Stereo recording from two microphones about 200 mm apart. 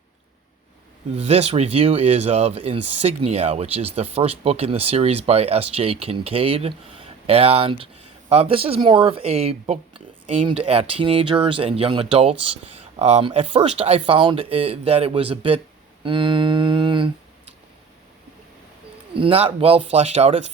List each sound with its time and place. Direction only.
1.1 s speech: 30° right (ahead or behind)
16.0 s humming: 25° right (ahead or behind)
19.1 s speech: 30° right (ahead or behind)